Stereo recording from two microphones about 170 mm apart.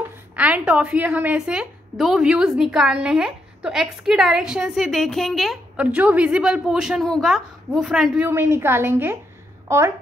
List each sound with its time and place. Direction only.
0.4 s a woman's voice: 5° right (ahead or behind)